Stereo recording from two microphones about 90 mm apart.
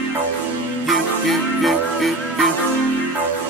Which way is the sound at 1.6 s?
Centre (ahead or behind).